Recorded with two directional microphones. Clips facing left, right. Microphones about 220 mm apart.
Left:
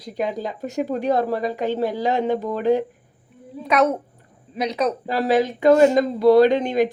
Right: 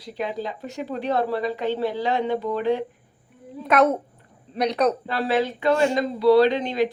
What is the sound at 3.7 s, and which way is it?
A man's voice, centre (ahead or behind).